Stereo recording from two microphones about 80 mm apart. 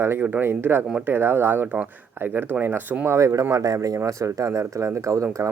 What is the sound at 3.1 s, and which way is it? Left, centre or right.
Speech, right.